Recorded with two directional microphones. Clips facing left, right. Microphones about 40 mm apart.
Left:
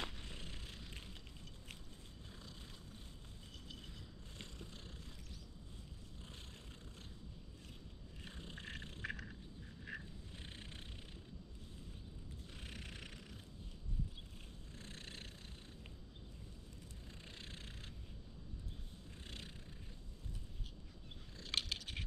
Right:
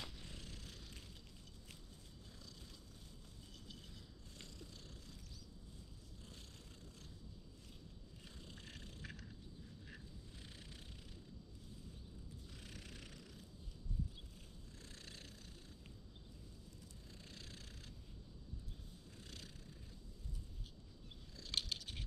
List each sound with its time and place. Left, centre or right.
0.0 s purr: left
4.4 s purr: left
8.3 s vehicle: left
9.9 s a sound: left
10.4 s cat: left
12.5 s cat: left
14.8 s cat: left
17.2 s vehicle: left
19.2 s a sound: left
21.4 s a sound: left